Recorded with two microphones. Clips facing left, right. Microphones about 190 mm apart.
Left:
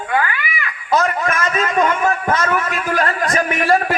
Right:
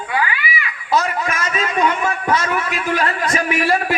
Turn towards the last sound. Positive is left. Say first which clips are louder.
# left 2 dB
turn(degrees=45)  # may be behind; listen again after turning